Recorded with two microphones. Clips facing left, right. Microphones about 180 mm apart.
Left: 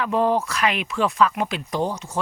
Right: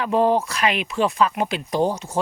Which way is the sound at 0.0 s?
30° right (ahead or behind).